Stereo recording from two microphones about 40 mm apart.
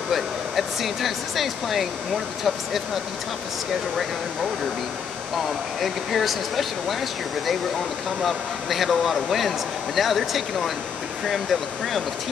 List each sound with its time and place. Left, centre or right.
0.1 s speech: centre
5.8 s speech: centre
8.2 s speech: centre